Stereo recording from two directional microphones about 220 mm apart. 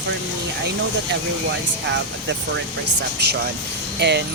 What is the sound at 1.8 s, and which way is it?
Speech, 55° right (ahead or behind).